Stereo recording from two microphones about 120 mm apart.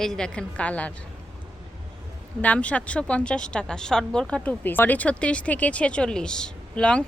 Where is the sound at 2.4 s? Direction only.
10° left (ahead or behind).